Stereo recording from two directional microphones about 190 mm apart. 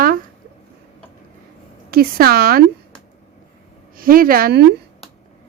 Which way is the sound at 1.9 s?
50° right (ahead or behind).